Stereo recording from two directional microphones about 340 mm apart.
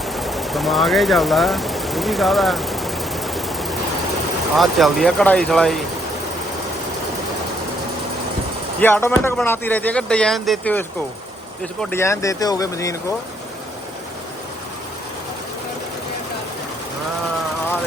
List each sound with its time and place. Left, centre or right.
0.0 s sewing machine: centre
4.5 s speech: centre
8.8 s speech: centre